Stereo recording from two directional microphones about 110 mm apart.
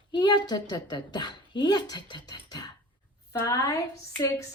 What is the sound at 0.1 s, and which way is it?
A woman's voice, 40° left (ahead or behind).